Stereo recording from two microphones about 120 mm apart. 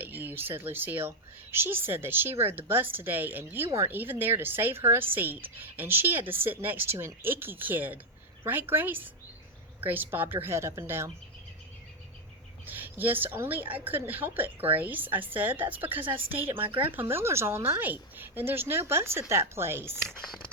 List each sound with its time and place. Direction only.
0.0 s a woman's voice: 15° right (ahead or behind)
12.6 s a woman's voice: 15° right (ahead or behind)
16.0 s speech: 50° right (ahead or behind)
16.9 s a woman's voice: 20° right (ahead or behind)
20.1 s speech: 5° left (ahead or behind)